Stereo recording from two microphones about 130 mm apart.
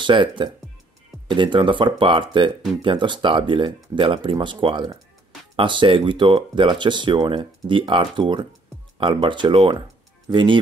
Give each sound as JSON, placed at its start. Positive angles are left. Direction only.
{"t": 0.0, "sound": "speech", "side_deg": -40}